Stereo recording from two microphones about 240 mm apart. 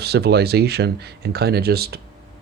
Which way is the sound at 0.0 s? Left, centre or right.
Right.